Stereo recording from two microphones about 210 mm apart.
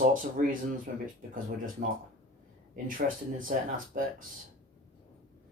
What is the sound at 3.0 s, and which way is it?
Speech, 45° right (ahead or behind).